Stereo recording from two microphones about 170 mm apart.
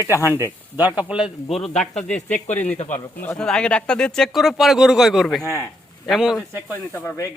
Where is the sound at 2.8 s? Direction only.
45° left (ahead or behind).